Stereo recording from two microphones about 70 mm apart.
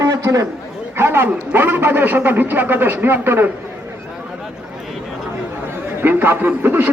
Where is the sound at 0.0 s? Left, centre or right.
Right.